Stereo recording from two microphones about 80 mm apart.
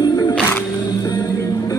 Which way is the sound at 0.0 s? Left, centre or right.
Left.